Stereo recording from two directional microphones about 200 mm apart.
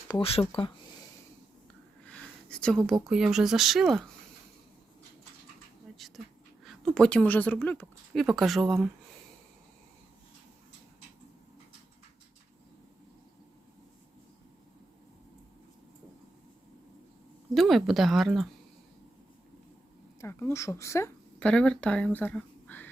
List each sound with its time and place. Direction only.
0.1 s speech: 30° left (ahead or behind)
2.0 s a sound: 5° left (ahead or behind)
3.1 s speech: 5° right (ahead or behind)
6.7 s speech: centre (ahead or behind)
17.5 s speech: centre (ahead or behind)
20.2 s speech: 15° left (ahead or behind)